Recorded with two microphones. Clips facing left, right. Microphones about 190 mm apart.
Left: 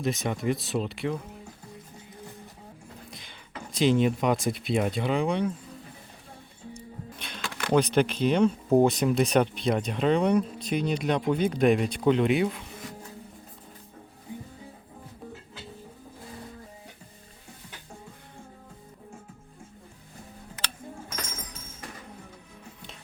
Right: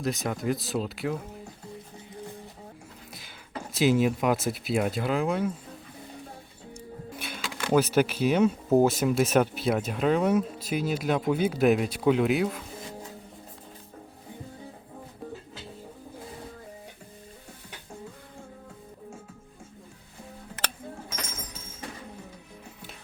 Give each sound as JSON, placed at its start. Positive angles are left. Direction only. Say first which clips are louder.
{"t": 0.0, "sound": "speech", "louder": "left 1 dB", "side_deg": 0}
{"t": 3.1, "sound": "a sound", "louder": "even", "side_deg": -5}
{"t": 3.7, "sound": "speech", "louder": "even", "side_deg": -5}
{"t": 7.2, "sound": "speech", "louder": "even", "side_deg": -5}